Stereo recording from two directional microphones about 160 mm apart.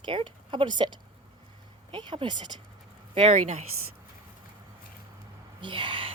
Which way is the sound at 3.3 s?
45° right (ahead or behind).